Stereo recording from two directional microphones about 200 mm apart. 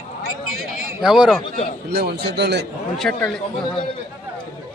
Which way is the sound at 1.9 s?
55° right (ahead or behind).